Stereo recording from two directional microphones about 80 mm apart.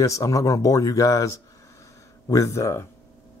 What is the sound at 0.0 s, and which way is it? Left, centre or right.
A man's voice, left.